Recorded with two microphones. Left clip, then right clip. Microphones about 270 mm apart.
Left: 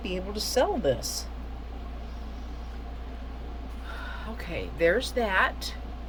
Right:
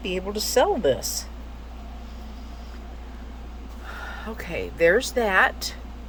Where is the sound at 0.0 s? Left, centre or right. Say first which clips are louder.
Right 5 dB; centre.